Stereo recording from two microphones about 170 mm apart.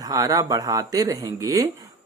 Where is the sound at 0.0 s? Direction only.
20° right (ahead or behind).